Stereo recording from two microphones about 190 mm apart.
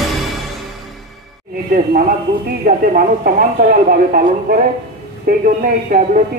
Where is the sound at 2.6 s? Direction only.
45° right (ahead or behind).